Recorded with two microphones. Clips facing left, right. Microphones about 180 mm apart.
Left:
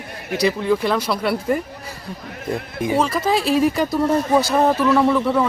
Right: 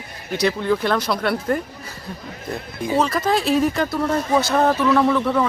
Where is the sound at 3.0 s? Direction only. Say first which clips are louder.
Even; 5° left (ahead or behind).